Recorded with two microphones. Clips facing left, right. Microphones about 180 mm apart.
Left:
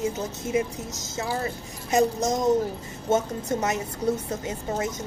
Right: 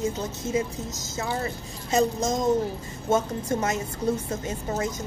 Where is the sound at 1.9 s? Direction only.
20° left (ahead or behind).